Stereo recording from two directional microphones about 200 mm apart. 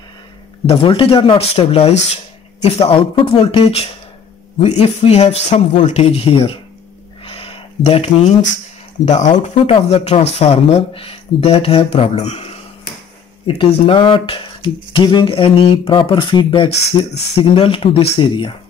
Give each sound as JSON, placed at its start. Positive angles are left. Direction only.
{"t": 0.7, "sound": "speech", "side_deg": 25}
{"t": 7.2, "sound": "a sound", "side_deg": 30}
{"t": 9.0, "sound": "speech", "side_deg": 35}
{"t": 13.6, "sound": "speech", "side_deg": 25}